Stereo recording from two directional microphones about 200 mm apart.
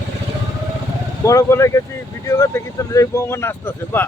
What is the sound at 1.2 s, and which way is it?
Speech, 15° left (ahead or behind).